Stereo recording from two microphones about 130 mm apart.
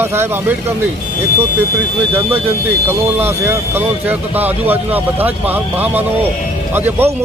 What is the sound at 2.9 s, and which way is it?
Speech, 15° right (ahead or behind).